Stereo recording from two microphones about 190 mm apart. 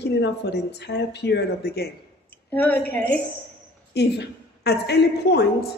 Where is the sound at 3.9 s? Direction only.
60° left (ahead or behind).